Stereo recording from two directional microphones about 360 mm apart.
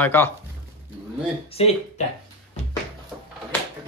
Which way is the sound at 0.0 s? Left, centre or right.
Centre.